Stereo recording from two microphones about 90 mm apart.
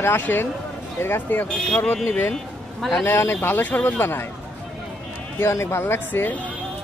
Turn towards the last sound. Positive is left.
turn(degrees=25)  # may be behind; listen again after turning